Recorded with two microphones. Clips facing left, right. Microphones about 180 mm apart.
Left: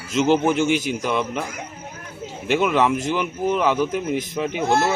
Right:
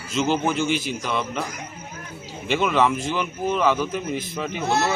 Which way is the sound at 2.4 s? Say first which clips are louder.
Left 2 dB; 10° left (ahead or behind).